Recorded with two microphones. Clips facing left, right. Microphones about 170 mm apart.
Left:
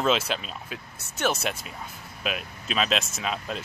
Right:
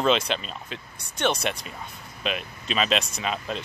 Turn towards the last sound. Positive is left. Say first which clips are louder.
# right 1 dB
turn(degrees=0)  # may be behind; listen again after turning